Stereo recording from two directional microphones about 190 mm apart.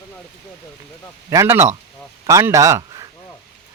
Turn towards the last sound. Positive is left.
turn(degrees=-15)  # may be behind; listen again after turning